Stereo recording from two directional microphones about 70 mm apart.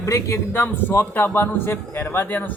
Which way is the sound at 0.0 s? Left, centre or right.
Left.